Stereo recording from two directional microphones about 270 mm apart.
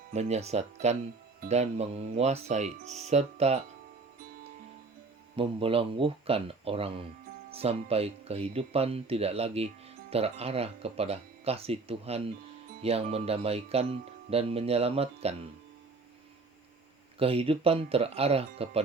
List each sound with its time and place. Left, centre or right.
0.1 s speech: right
5.4 s speech: centre
17.2 s speech: right